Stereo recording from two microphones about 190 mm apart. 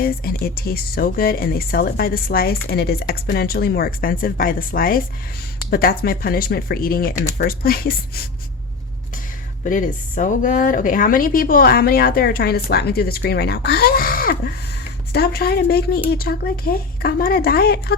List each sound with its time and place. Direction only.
0.0 s speech: 55° left (ahead or behind)
9.6 s speech: 45° left (ahead or behind)